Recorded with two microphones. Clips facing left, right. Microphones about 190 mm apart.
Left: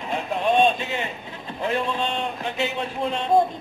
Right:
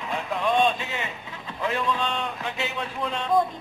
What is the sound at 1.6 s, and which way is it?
Speech, 25° left (ahead or behind).